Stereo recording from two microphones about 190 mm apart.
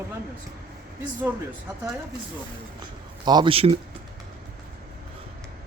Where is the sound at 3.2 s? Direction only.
20° right (ahead or behind).